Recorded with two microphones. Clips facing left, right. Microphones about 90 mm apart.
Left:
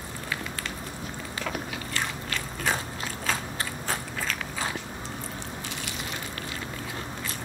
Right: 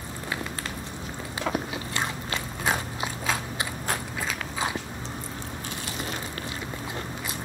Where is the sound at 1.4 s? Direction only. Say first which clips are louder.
Right 5 dB; 25° right (ahead or behind).